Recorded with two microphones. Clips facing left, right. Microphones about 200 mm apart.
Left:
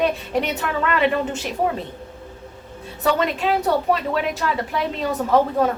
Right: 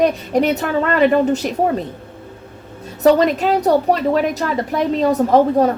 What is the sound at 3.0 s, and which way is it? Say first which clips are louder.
A woman's voice: right 7 dB; 40° right (ahead or behind).